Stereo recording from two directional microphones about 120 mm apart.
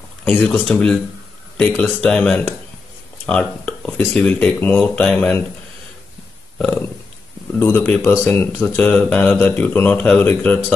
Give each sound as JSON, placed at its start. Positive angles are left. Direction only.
{"t": 0.4, "sound": "speech", "side_deg": 5}
{"t": 7.5, "sound": "speech", "side_deg": 15}